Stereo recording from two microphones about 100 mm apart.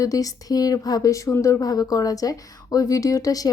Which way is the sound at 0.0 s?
35° left (ahead or behind).